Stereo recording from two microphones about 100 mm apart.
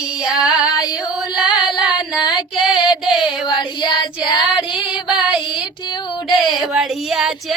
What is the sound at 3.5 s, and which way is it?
Child singing, 50° left (ahead or behind).